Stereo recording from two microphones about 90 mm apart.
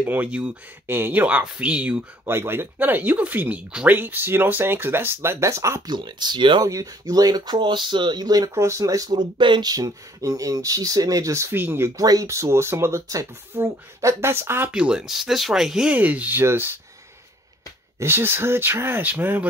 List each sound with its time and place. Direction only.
0.0 s speech: 20° right (ahead or behind)
0.8 s speech: 25° right (ahead or behind)
2.2 s speech: 25° right (ahead or behind)
5.9 s speech: 55° right (ahead or behind)
6.6 s speech: 40° right (ahead or behind)
8.5 s speech: 35° right (ahead or behind)
12.0 s speech: 40° right (ahead or behind)
14.7 s speech: 10° right (ahead or behind)
15.9 s speech: 15° right (ahead or behind)
17.9 s speech: 25° right (ahead or behind)